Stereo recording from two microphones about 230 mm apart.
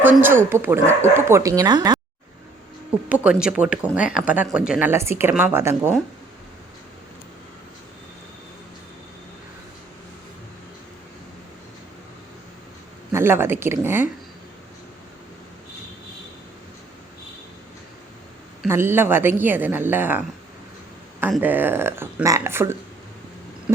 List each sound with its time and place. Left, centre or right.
0.0 s a woman's voice: centre
3.1 s a woman's voice: centre
13.1 s a woman's voice: centre
18.6 s a woman's voice: centre